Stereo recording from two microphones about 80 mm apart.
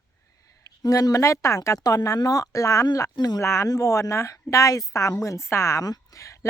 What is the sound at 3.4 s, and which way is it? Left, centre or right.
Speech, left.